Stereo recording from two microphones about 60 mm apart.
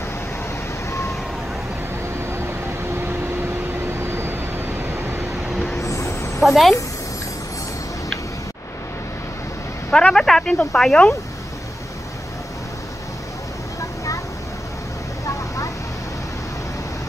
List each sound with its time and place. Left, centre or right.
2.3 s vehicle: right
5.8 s chicken: left
6.4 s a woman's voice: centre
9.8 s a sound: centre
10.1 s a sound: centre
10.7 s speech: centre